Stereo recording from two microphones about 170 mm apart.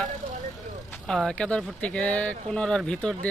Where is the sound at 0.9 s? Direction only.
5° left (ahead or behind).